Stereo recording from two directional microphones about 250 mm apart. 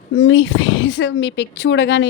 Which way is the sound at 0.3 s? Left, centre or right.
Left.